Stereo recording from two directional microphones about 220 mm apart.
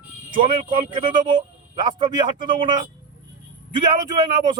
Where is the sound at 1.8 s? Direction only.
20° right (ahead or behind).